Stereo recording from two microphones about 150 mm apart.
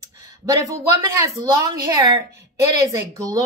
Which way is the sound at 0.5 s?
20° right (ahead or behind).